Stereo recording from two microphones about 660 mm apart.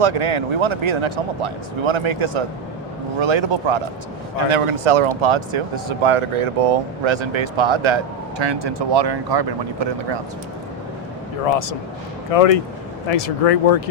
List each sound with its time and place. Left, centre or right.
0.0 s speech: right
12.3 s speech: left